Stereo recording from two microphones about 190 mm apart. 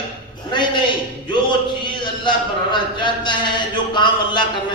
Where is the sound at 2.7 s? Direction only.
25° left (ahead or behind).